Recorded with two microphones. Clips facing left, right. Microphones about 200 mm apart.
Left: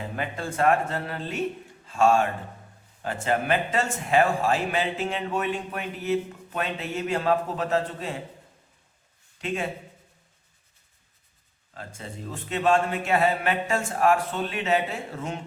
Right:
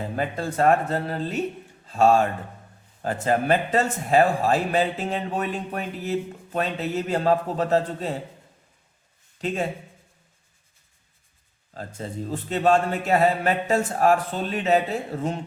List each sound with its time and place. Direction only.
0.2 s speech: 35° right (ahead or behind)
9.4 s speech: 35° right (ahead or behind)
11.7 s speech: 35° right (ahead or behind)